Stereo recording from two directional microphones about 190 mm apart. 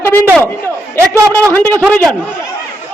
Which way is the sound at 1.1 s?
15° right (ahead or behind).